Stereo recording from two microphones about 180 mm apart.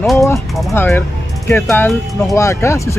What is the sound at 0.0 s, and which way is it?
Speech, centre (ahead or behind).